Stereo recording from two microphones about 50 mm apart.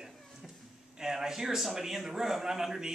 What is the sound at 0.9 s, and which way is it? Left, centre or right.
A man's voice, centre.